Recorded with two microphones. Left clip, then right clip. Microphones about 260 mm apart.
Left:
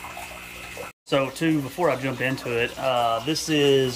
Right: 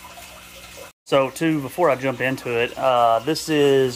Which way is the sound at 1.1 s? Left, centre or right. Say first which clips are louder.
Right 4 dB; centre.